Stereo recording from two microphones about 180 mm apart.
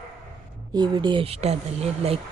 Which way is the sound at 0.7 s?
25° right (ahead or behind).